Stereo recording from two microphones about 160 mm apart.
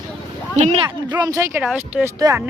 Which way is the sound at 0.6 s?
30° right (ahead or behind).